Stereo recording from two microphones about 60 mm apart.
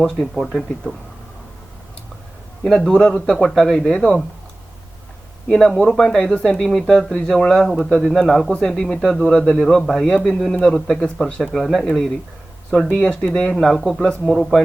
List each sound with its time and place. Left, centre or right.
0.0 s speech: centre
2.6 s speech: centre
2.9 s speech: centre
5.5 s speech: centre
7.8 s speech: centre
8.0 s speech: centre
8.4 s speech: centre
13.4 s speech: centre